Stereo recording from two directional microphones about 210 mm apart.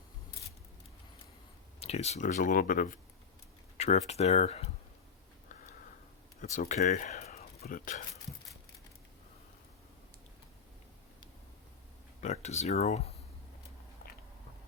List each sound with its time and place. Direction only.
1.8 s speech: 30° left (ahead or behind)
6.4 s speech: 35° left (ahead or behind)
12.2 s speech: 35° left (ahead or behind)